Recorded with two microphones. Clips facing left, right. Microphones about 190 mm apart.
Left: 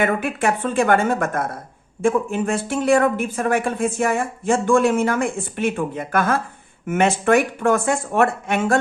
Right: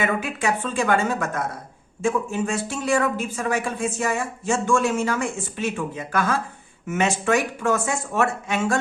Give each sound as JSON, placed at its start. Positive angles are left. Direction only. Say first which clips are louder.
{"t": 0.0, "sound": "speech", "louder": "left 4 dB", "side_deg": 55}